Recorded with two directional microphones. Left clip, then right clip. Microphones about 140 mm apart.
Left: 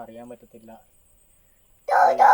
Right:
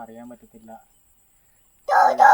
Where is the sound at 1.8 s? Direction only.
30° right (ahead or behind).